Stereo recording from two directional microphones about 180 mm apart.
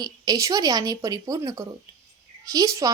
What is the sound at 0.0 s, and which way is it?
A woman's voice, 20° right (ahead or behind).